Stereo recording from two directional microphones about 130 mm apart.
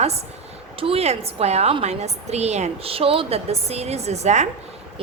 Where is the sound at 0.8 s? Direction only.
50° right (ahead or behind).